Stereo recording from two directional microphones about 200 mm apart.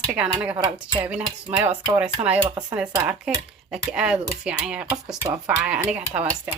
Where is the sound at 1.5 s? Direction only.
25° right (ahead or behind).